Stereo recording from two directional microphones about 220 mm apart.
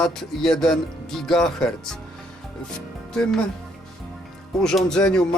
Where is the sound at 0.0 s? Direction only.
Centre (ahead or behind).